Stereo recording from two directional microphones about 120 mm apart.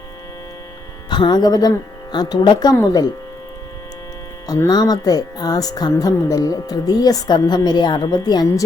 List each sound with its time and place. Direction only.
1.1 s speech: 40° left (ahead or behind)
4.4 s speech: 25° left (ahead or behind)
4.7 s speech: 35° left (ahead or behind)